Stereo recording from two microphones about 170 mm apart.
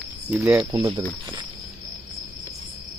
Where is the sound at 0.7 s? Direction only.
20° right (ahead or behind).